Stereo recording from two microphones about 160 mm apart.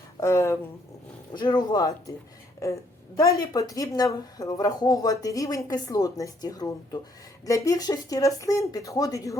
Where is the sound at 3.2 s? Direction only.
20° left (ahead or behind).